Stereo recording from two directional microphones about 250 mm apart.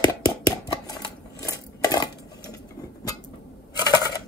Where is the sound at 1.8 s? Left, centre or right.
Centre.